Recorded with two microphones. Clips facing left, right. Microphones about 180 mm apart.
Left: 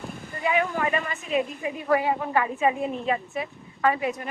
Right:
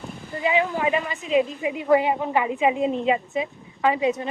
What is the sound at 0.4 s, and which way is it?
A woman's voice, 20° right (ahead or behind).